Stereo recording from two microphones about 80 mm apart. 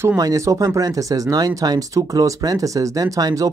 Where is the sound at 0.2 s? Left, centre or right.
Right.